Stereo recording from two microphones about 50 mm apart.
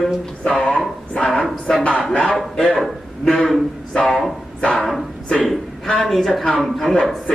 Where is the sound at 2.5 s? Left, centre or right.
Centre.